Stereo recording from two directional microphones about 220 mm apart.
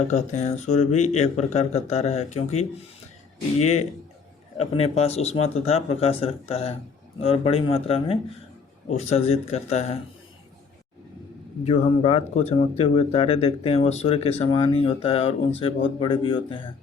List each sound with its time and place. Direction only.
0.1 s speech: 30° left (ahead or behind)
11.6 s speech: 25° left (ahead or behind)